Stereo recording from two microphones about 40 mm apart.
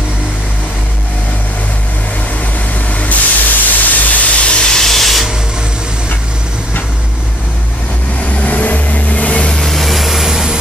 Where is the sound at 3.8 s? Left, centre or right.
Left.